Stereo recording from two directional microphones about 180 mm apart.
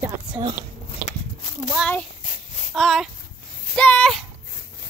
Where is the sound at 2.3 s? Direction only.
45° left (ahead or behind).